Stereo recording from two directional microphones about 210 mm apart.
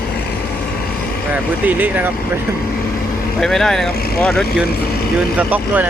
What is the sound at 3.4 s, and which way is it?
Speech, centre (ahead or behind).